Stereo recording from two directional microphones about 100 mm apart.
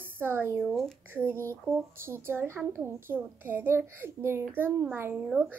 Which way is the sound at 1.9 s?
25° right (ahead or behind).